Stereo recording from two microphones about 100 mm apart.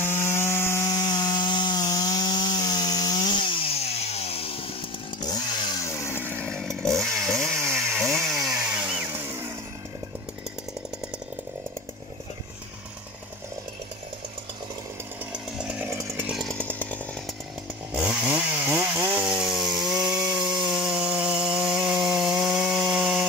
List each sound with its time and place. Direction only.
0.0 s rub: 25° left (ahead or behind)
0.9 s wood: 40° left (ahead or behind); by 4.6 s 75° left (ahead or behind)
5.2 s chainsaw: 45° left (ahead or behind)
5.9 s chainsaw: 25° left (ahead or behind)
6.4 s chainsaw: 5° left (ahead or behind)
8.5 s chainsaw: 10° right (ahead or behind)
15.9 s chainsaw: 25° right (ahead or behind)
16.5 s chainsaw: 15° left (ahead or behind)
17.9 s chainsaw: 10° right (ahead or behind)
19.2 s chainsaw: 5° right (ahead or behind)